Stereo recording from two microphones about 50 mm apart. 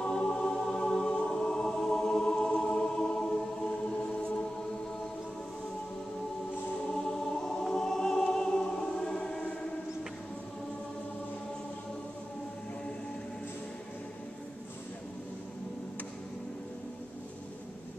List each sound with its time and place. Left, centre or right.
0.0 s music: centre
6.9 s choir: centre